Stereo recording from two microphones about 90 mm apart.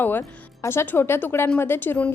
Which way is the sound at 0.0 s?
25° left (ahead or behind).